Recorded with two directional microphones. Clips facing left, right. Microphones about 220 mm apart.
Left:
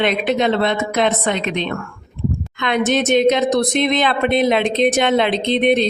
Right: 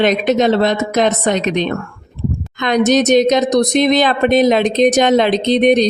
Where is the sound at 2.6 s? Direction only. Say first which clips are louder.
Right 5 dB; 40° right (ahead or behind).